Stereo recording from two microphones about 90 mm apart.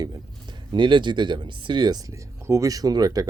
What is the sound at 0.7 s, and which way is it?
Speech, 60° right (ahead or behind).